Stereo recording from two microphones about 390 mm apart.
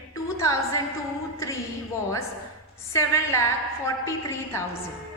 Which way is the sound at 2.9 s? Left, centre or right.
Centre.